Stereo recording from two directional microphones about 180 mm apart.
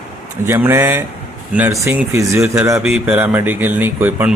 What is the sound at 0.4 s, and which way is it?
A man's voice, 15° right (ahead or behind).